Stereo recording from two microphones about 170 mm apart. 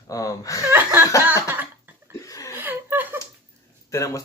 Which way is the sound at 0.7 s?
15° right (ahead or behind).